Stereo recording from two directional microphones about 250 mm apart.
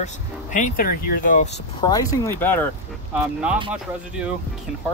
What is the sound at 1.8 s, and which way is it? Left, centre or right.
Speech, centre.